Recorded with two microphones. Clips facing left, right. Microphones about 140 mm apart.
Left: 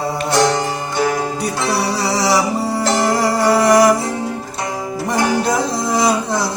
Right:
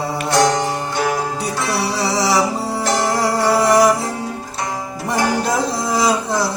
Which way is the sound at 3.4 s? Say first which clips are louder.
Left 2 dB; centre (ahead or behind).